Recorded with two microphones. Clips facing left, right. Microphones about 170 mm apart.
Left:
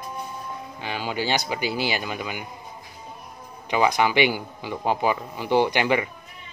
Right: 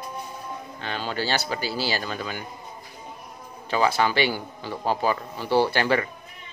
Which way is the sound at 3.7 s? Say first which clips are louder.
Left 1 dB; 15° left (ahead or behind).